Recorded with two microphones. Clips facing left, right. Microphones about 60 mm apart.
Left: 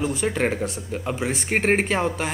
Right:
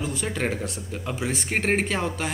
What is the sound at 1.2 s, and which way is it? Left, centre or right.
Speech, centre.